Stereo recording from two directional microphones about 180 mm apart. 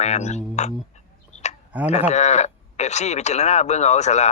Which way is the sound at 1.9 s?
40° left (ahead or behind).